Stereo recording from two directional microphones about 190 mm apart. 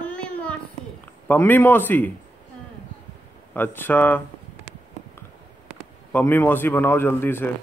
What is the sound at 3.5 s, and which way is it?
Speech, 10° left (ahead or behind).